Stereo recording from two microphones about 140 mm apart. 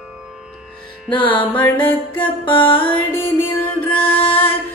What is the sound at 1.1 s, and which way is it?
Music, 35° left (ahead or behind).